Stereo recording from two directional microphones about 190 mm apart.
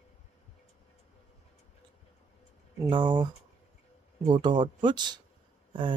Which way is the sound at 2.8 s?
25° right (ahead or behind).